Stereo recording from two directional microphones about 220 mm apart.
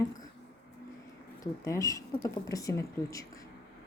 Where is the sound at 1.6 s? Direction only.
15° left (ahead or behind).